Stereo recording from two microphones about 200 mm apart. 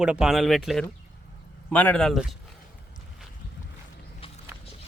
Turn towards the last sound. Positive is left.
turn(degrees=-10)  # may be behind; listen again after turning